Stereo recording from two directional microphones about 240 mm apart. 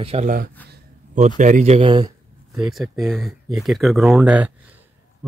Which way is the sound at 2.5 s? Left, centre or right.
Centre.